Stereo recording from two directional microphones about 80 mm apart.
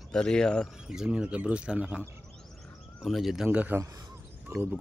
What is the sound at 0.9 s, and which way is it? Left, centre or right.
Speech, centre.